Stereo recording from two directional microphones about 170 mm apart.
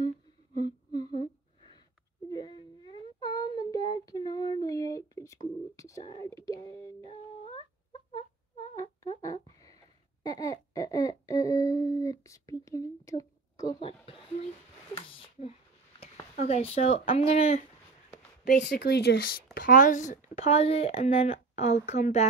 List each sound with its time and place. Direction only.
0.6 s humming: 25° left (ahead or behind)
4.0 s child singing: 25° left (ahead or behind)
4.6 s a sound: 20° left (ahead or behind)
6.0 s whispering: 25° left (ahead or behind)
7.1 s humming: 30° left (ahead or behind)
8.7 s a sound: 20° left (ahead or behind)
13.7 s a sound: 30° left (ahead or behind)
16.3 s speech: 40° left (ahead or behind)
18.4 s speech: 60° left (ahead or behind)
19.5 s speech: 55° left (ahead or behind)